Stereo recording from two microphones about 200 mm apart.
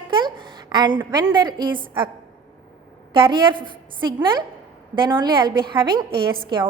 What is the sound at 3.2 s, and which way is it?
A woman's voice, 25° right (ahead or behind).